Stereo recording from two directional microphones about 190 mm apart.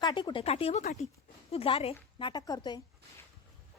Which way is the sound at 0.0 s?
25° left (ahead or behind).